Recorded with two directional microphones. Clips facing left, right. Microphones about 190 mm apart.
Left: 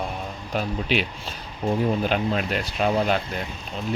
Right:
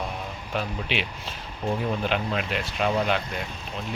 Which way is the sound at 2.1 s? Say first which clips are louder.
Left 3 dB; 40° left (ahead or behind).